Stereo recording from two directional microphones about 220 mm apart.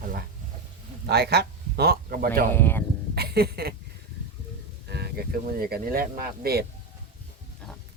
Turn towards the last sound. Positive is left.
turn(degrees=-45)  # may be behind; listen again after turning